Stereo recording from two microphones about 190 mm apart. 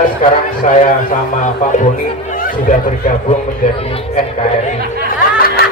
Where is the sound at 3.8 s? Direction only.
30° left (ahead or behind).